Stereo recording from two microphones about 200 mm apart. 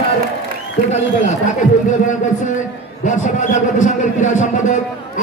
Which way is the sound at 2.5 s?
40° left (ahead or behind).